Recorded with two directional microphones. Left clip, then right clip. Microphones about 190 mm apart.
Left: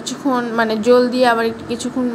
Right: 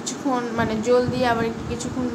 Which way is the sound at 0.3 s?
25° left (ahead or behind).